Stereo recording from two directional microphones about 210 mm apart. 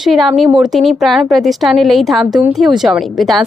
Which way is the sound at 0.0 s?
Centre (ahead or behind).